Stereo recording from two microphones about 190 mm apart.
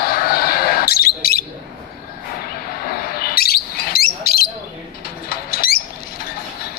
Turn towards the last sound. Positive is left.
turn(degrees=55)  # may be behind; listen again after turning